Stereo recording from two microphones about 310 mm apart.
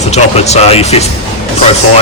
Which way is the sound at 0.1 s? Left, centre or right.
Left.